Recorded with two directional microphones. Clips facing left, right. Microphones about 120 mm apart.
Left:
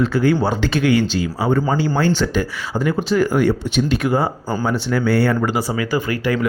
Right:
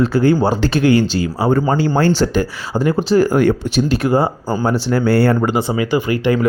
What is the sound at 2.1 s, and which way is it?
Speech, 35° right (ahead or behind).